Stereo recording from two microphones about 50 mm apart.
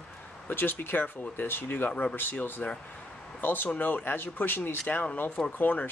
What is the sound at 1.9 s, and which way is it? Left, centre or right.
Speech, left.